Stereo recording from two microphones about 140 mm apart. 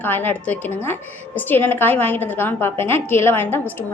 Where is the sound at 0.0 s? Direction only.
15° left (ahead or behind).